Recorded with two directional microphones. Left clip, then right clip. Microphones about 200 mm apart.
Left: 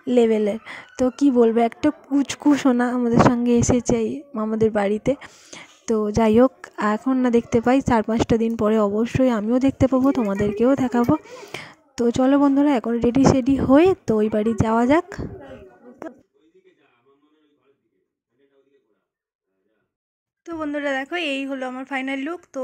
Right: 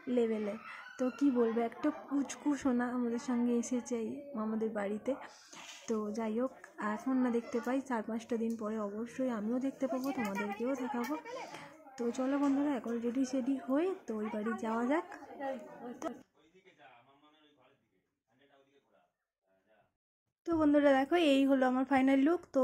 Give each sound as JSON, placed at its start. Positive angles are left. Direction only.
{"t": 0.0, "sound": "a woman's voice", "side_deg": 45}
{"t": 11.2, "sound": "a woman's voice", "side_deg": 35}
{"t": 20.4, "sound": "speech", "side_deg": -5}